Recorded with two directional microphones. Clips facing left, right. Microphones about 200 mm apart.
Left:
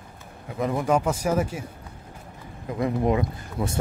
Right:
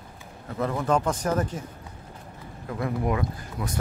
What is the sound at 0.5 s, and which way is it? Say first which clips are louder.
Speech: left 2 dB; 15° left (ahead or behind).